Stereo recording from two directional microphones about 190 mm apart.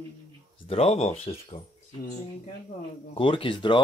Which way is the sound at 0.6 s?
30° left (ahead or behind).